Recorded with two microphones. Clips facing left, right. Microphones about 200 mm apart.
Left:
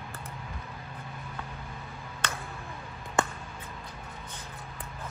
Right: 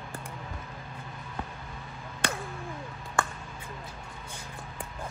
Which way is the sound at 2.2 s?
10° right (ahead or behind).